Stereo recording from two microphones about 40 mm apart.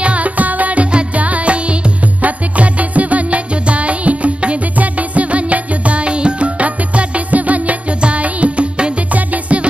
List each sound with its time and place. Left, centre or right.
0.0 s music: right